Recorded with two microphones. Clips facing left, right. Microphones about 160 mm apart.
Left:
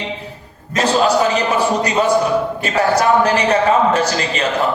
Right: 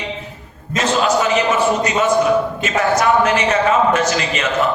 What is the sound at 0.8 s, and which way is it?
A man's voice, 35° left (ahead or behind).